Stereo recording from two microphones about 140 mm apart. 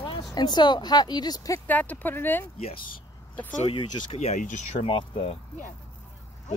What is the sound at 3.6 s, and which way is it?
Speech, 45° left (ahead or behind).